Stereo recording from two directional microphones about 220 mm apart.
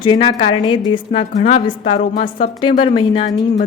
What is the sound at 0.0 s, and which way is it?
A woman's voice, 20° left (ahead or behind).